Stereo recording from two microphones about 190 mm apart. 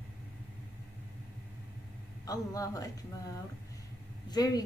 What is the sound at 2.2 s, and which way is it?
Speech, 20° left (ahead or behind).